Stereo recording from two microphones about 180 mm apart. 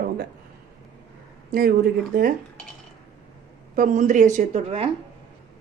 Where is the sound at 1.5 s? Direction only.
55° right (ahead or behind).